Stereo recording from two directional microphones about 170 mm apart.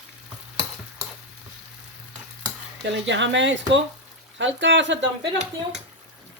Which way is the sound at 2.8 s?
90° right.